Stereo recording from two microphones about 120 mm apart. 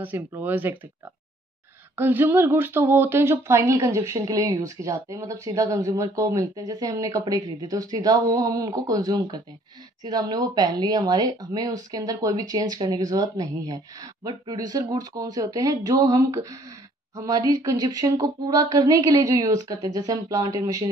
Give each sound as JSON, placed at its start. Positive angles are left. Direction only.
{"t": 0.0, "sound": "speech", "side_deg": -15}
{"t": 2.0, "sound": "speech", "side_deg": -15}